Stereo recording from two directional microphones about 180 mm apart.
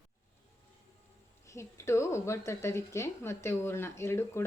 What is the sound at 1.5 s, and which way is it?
Speech, 15° left (ahead or behind).